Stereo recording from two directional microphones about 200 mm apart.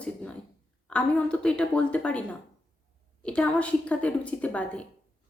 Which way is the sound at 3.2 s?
5° left (ahead or behind).